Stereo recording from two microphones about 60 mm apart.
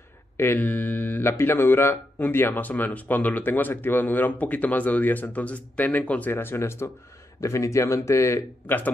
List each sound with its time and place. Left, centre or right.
0.6 s mantra: left
1.4 s speech: left
6.3 s speech: left
7.3 s a man's voice: left
8.6 s speech: left